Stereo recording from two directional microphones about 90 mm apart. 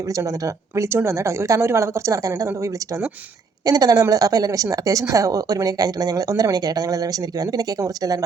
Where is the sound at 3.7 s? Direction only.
45° right (ahead or behind).